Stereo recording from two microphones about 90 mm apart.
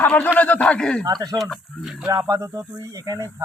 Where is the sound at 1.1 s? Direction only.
45° right (ahead or behind).